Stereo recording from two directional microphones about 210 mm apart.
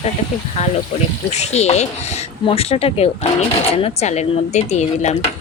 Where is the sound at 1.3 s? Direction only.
30° left (ahead or behind).